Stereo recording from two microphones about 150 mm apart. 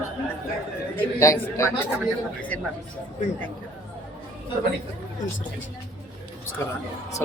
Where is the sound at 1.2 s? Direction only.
20° left (ahead or behind).